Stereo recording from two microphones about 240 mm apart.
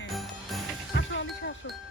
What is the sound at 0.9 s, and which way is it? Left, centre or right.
Music, left.